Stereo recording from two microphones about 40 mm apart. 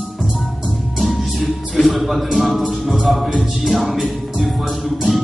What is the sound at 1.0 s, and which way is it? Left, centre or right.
Music, centre.